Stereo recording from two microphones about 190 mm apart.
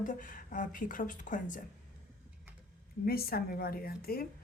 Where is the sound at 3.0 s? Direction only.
55° left (ahead or behind).